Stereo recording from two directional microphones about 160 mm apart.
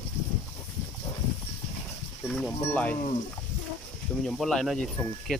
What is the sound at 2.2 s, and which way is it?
Speech, 5° left (ahead or behind).